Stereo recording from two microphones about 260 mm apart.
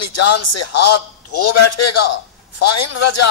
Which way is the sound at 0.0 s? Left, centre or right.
Left.